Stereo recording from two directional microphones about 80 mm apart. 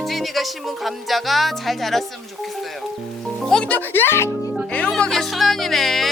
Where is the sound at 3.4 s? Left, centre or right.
Centre; by 4.2 s left.